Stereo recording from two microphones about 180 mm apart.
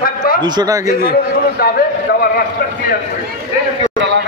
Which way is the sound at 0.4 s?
25° right (ahead or behind).